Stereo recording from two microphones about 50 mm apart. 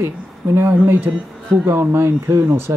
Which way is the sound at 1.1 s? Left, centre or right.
Right.